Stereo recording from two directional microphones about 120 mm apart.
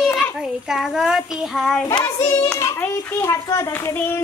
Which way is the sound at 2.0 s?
20° left (ahead or behind).